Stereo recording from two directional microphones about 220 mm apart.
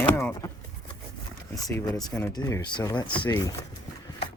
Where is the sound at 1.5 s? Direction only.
15° left (ahead or behind).